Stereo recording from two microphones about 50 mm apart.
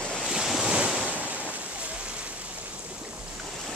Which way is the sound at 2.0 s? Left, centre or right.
Right.